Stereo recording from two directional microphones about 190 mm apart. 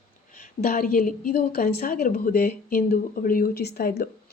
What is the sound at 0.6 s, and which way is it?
Speech, 50° left (ahead or behind).